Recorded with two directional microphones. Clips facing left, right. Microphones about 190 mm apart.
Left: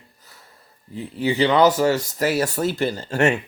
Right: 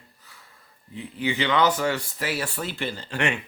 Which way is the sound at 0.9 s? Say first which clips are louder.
Left 6 dB; 40° left (ahead or behind).